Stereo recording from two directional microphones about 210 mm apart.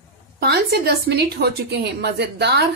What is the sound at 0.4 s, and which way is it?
A woman's voice, 50° right (ahead or behind).